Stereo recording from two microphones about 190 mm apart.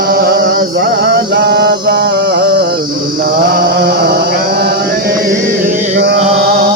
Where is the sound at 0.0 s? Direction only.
55° right (ahead or behind).